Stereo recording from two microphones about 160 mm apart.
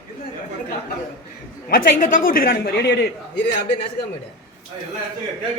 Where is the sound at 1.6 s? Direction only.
60° left (ahead or behind); by 3.0 s 80° left.